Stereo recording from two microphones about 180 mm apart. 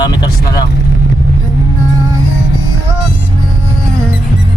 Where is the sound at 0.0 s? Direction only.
20° left (ahead or behind).